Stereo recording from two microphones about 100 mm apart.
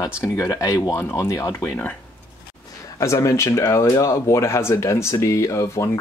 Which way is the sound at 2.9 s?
30° left (ahead or behind).